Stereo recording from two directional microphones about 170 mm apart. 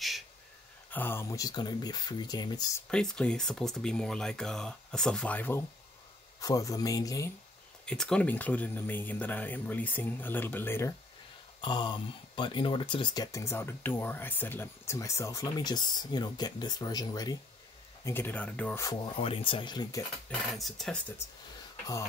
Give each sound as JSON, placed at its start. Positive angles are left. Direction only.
{"t": 0.8, "sound": "speech", "side_deg": 10}
{"t": 2.9, "sound": "speech", "side_deg": 5}
{"t": 6.4, "sound": "speech", "side_deg": 20}
{"t": 7.8, "sound": "speech", "side_deg": 5}
{"t": 11.6, "sound": "speech", "side_deg": 30}
{"t": 19.1, "sound": "speech", "side_deg": 35}
{"t": 20.2, "sound": "speech", "side_deg": 0}